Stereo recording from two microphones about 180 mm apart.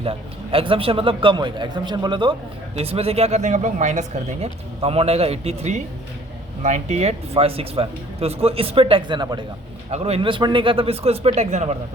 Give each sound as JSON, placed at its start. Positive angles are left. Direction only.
{"t": 0.0, "sound": "a man's voice", "side_deg": -30}